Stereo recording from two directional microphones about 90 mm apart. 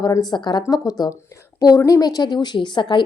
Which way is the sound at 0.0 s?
45° left (ahead or behind).